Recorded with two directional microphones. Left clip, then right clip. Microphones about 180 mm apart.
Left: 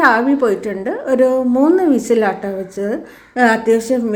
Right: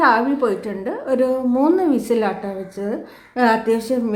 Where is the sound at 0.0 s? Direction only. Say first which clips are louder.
Left 3 dB; 15° left (ahead or behind).